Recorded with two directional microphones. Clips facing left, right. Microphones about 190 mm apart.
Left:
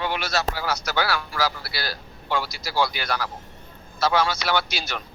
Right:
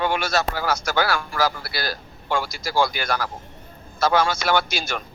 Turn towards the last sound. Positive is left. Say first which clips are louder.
# right 3 dB
turn(degrees=-50)  # may be behind; listen again after turning